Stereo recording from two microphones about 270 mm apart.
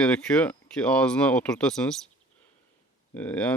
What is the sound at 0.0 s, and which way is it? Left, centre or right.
Speech, centre.